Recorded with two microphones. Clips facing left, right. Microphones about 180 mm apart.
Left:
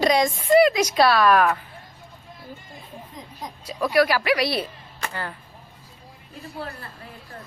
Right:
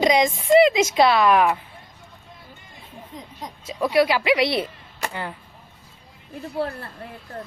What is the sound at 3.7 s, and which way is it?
A woman's voice, 25° right (ahead or behind).